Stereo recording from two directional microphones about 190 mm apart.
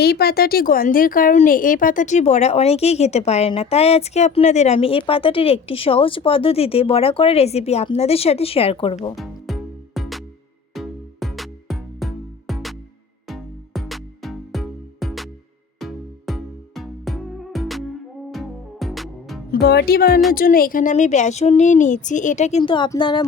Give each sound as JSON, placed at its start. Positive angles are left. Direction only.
{"t": 0.0, "sound": "speech", "side_deg": 55}
{"t": 9.1, "sound": "music", "side_deg": 0}
{"t": 19.5, "sound": "speech", "side_deg": 55}